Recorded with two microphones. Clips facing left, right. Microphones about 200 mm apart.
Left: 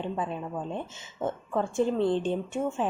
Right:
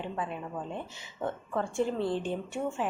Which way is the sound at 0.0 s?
20° left (ahead or behind).